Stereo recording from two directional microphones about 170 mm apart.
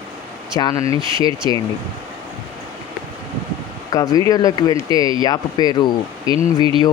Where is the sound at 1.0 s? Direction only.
30° right (ahead or behind).